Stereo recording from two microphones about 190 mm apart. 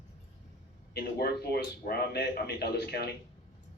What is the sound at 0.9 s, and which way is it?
A man's voice, 55° left (ahead or behind).